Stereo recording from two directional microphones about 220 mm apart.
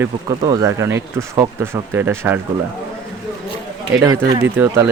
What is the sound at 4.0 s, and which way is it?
Speech, 15° right (ahead or behind).